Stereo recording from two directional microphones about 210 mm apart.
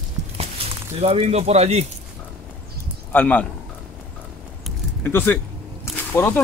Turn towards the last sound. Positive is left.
turn(degrees=10)  # may be behind; listen again after turning